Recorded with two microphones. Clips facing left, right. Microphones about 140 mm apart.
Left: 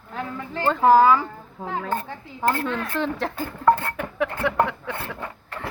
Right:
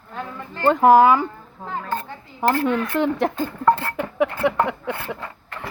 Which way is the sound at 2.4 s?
15° right (ahead or behind).